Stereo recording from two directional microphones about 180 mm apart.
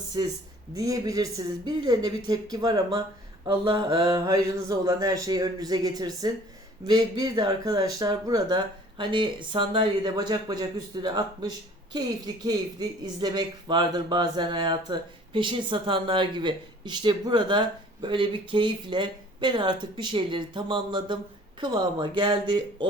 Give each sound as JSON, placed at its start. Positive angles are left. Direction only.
{"t": 0.2, "sound": "speech", "side_deg": -25}